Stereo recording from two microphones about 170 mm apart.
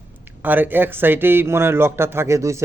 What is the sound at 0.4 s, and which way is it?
A man's voice, 10° right (ahead or behind).